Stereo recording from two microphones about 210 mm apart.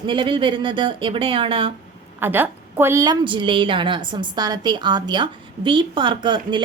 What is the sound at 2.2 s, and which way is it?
A woman's voice, 10° right (ahead or behind).